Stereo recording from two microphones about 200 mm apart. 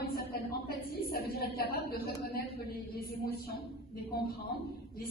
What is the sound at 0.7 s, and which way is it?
A woman's voice, 50° left (ahead or behind).